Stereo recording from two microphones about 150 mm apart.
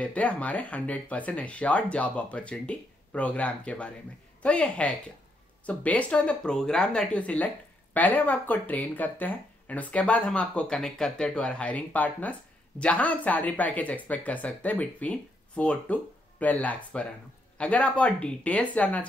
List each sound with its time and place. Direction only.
0.0 s speech: 10° left (ahead or behind)